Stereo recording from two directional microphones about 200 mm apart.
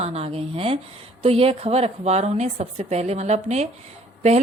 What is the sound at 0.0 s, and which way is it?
A woman's voice, 30° right (ahead or behind).